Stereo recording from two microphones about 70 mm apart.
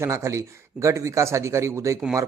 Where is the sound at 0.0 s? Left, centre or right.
Right.